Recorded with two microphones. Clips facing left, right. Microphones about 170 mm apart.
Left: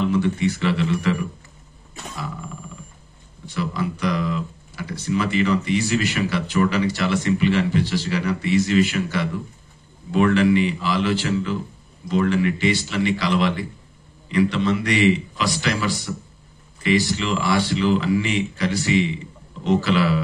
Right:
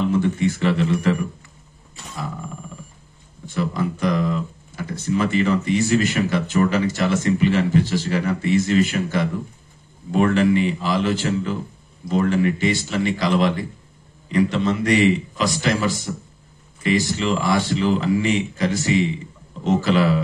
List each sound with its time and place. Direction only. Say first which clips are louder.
0.0 s speech: right 1 dB; 45° right (ahead or behind)
3.4 s speech: right 2 dB; 45° right (ahead or behind)